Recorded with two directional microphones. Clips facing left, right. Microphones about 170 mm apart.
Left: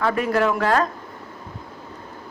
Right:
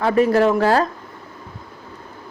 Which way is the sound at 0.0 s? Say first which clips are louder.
Right 5 dB; 30° right (ahead or behind).